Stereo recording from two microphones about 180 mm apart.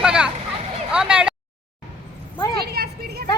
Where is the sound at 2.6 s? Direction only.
60° right (ahead or behind).